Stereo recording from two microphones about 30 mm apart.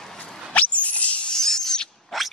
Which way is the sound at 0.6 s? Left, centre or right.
Left.